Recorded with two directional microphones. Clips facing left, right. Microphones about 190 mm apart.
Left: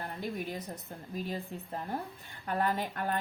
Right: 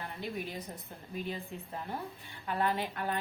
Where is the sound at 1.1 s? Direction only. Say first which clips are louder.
Left 1 dB; 40° left (ahead or behind).